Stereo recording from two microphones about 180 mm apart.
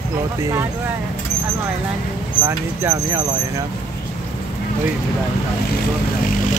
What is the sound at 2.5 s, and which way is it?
Speech, 15° right (ahead or behind).